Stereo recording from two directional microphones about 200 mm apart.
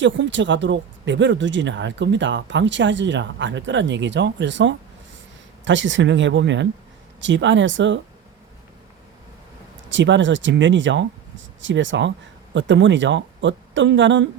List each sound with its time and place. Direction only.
0.0 s speech: 65° right (ahead or behind)
9.9 s speech: 65° right (ahead or behind)